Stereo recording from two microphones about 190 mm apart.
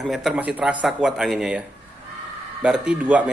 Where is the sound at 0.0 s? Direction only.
Centre (ahead or behind).